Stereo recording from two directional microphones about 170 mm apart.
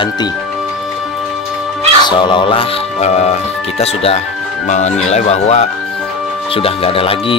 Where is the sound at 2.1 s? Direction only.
25° left (ahead or behind).